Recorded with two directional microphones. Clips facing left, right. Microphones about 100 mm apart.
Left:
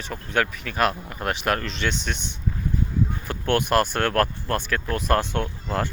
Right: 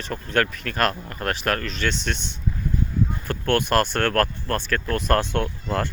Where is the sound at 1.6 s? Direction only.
30° left (ahead or behind).